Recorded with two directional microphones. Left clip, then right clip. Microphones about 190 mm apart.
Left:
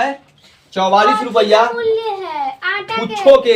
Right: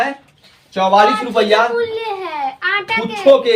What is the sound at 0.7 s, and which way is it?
Speech, 15° left (ahead or behind).